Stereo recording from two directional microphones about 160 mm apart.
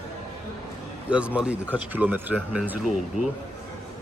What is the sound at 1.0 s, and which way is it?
A man's voice, 10° right (ahead or behind).